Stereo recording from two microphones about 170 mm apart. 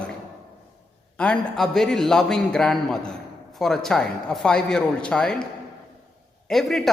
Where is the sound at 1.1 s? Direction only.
5° left (ahead or behind).